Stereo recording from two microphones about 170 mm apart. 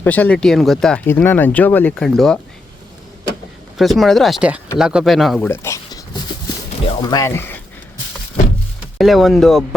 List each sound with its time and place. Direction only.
0.0 s speech: 10° left (ahead or behind)
3.8 s speech: centre (ahead or behind)
5.5 s a sound: 15° left (ahead or behind)
6.8 s speech: 25° left (ahead or behind)
9.0 s speech: centre (ahead or behind)